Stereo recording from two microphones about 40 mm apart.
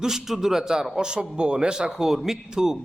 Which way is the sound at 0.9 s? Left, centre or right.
Right.